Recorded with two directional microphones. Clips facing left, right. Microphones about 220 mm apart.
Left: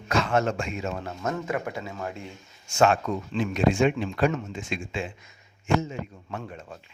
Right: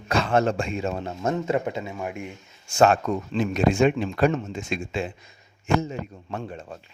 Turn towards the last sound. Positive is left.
turn(degrees=-30)  # may be behind; listen again after turning